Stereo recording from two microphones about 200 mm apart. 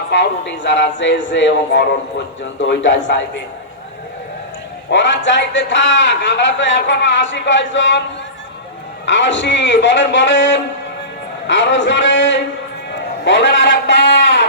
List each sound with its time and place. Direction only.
0.1 s a man's voice: 60° left (ahead or behind)
4.9 s a man's voice: 65° left (ahead or behind)
9.0 s a man's voice: 65° left (ahead or behind)